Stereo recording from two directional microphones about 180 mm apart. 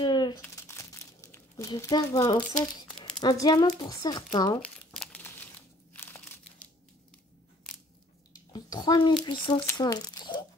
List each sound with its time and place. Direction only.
0.0 s crumpling: 25° left (ahead or behind)
3.2 s speech: 25° left (ahead or behind)
4.6 s crumpling: 5° left (ahead or behind)
8.3 s a sound: 20° left (ahead or behind)
9.2 s speech: 25° left (ahead or behind)